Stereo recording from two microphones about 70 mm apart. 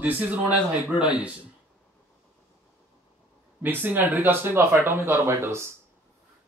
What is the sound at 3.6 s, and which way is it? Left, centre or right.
Speech, right.